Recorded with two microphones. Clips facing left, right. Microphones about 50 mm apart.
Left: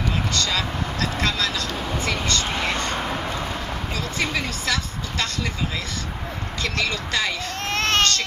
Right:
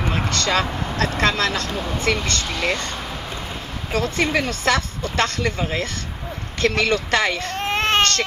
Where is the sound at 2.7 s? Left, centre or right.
Left.